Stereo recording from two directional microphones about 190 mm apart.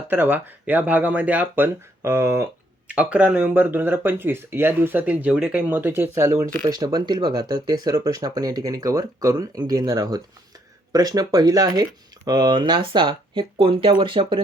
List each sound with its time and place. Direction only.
0.1 s speech: 10° right (ahead or behind); by 14.4 s 25° right (ahead or behind)